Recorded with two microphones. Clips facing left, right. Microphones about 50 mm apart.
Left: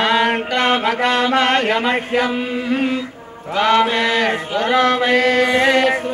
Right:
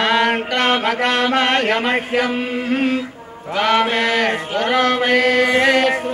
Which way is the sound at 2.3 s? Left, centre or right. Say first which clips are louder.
Even; right.